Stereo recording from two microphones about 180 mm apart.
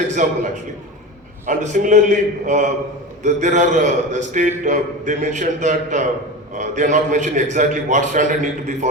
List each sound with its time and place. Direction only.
0.1 s a man's voice: 45° right (ahead or behind)